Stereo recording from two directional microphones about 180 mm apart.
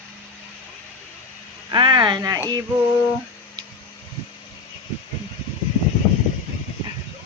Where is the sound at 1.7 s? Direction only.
25° right (ahead or behind).